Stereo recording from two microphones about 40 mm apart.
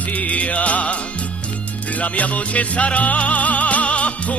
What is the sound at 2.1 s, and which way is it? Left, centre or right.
Music, left.